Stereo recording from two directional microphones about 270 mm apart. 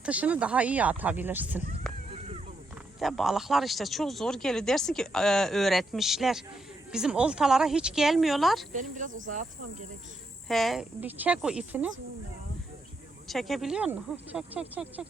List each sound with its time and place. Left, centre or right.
0.0 s speech: centre
3.0 s speech: centre
8.7 s speech: right
10.5 s speech: centre
13.2 s speech: centre